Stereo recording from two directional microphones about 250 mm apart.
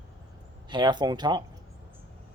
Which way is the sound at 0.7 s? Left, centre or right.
Centre.